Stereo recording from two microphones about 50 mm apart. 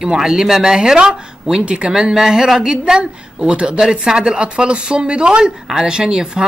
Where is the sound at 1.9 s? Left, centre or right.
Centre.